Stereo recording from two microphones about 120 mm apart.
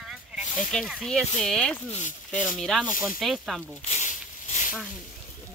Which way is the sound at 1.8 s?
80° left.